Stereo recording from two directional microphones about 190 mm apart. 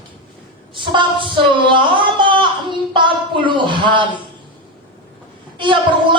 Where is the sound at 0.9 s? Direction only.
25° right (ahead or behind).